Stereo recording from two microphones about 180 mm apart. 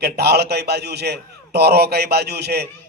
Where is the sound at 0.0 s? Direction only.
65° right (ahead or behind).